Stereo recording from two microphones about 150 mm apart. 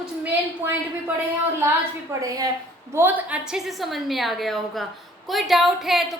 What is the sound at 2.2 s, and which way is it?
Speech, 25° right (ahead or behind).